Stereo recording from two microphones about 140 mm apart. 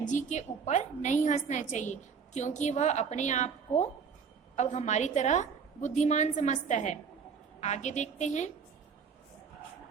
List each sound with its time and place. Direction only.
0.0 s a woman's voice: 60° left (ahead or behind)